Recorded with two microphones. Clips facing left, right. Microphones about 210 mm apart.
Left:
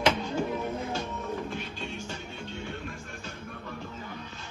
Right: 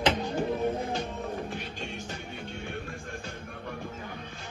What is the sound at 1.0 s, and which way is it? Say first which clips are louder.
Music: even; 50° right (ahead or behind).